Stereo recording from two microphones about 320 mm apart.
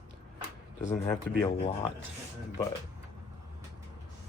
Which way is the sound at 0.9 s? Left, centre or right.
Centre.